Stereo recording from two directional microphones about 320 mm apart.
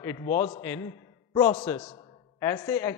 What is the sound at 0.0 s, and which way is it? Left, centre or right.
A man's voice, centre.